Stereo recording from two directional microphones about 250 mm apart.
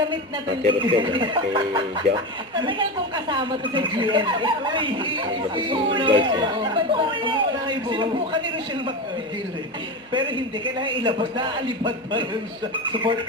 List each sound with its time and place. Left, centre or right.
0.6 s speech: right
10.1 s speech: centre